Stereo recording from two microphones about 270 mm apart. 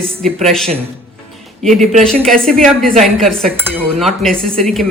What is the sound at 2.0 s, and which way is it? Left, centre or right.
Speech, centre.